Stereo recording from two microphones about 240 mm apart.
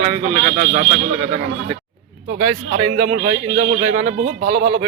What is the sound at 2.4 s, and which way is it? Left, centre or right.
A man's voice, right.